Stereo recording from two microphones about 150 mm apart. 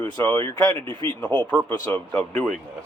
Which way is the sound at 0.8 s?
35° right (ahead or behind).